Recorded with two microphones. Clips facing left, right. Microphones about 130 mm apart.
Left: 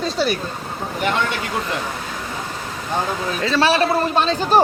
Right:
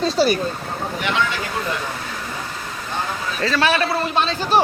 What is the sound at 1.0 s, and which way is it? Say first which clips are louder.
Speech: left 2 dB; 50° left (ahead or behind).